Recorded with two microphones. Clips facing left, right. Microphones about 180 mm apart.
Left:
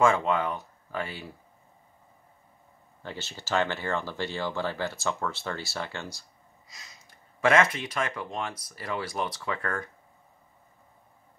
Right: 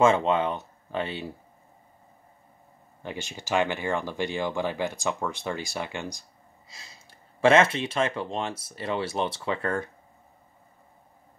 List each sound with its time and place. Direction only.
0.0 s speech: 25° right (ahead or behind)
3.0 s speech: 15° right (ahead or behind)
6.7 s speech: 30° right (ahead or behind)